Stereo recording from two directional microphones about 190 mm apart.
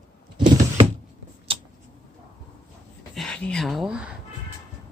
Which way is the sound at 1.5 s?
30° right (ahead or behind).